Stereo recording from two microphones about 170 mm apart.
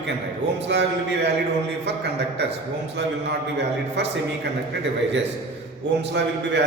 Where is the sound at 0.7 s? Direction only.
90° right.